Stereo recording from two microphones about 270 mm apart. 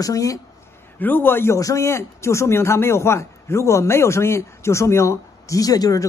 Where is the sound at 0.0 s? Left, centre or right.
Centre.